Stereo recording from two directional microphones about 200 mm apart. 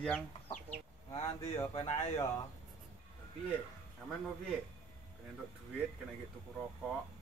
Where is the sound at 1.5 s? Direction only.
20° left (ahead or behind).